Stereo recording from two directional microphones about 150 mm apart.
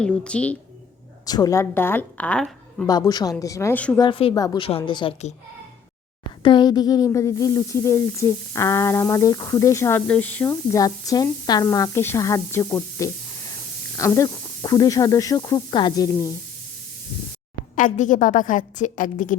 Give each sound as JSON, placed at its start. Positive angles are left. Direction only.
{"t": 0.0, "sound": "a woman's voice", "side_deg": 5}
{"t": 1.2, "sound": "a woman's voice", "side_deg": 25}
{"t": 2.8, "sound": "speech", "side_deg": 25}
{"t": 3.9, "sound": "a woman's voice", "side_deg": 30}
{"t": 4.4, "sound": "a woman's voice", "side_deg": 25}
{"t": 6.4, "sound": "speech", "side_deg": 30}
{"t": 17.7, "sound": "a woman's voice", "side_deg": 60}